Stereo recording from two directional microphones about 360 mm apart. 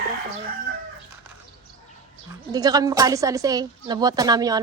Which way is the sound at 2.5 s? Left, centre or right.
Centre.